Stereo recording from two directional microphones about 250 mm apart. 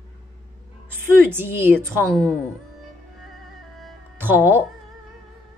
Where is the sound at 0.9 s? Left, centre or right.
Centre.